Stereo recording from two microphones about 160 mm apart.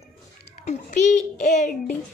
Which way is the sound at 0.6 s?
45° left (ahead or behind).